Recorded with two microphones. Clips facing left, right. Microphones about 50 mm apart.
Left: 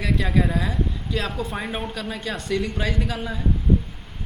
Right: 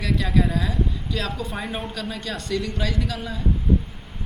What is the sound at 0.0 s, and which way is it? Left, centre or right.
Speech, centre.